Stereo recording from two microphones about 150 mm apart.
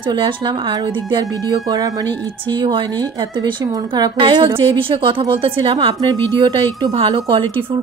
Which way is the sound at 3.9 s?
30° right (ahead or behind).